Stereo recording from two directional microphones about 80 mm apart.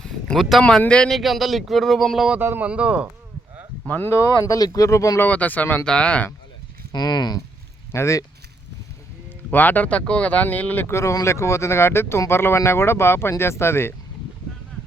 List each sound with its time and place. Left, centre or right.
0.0 s a sound: centre
0.8 s speech: centre
1.1 s speech: centre
2.4 s speech: right
2.6 s speech: centre
3.8 s speech: left
4.3 s speech: left
5.2 s speech: centre
6.9 s speech: left
7.9 s speech: left
9.5 s speech: left
10.8 s speech: left